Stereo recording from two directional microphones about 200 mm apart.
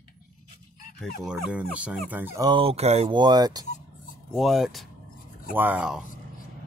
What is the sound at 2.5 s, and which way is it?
Speech, 25° right (ahead or behind).